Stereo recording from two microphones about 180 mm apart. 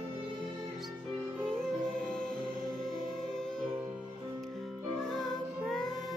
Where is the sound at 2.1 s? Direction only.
5° left (ahead or behind).